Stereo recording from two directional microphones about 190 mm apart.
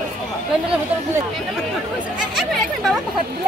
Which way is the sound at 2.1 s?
5° right (ahead or behind).